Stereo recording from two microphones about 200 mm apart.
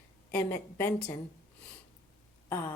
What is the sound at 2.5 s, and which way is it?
Speech, 10° left (ahead or behind).